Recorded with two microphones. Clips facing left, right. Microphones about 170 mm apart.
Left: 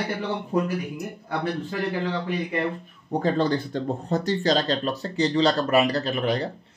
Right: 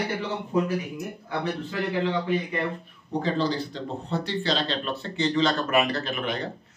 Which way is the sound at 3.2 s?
50° left (ahead or behind).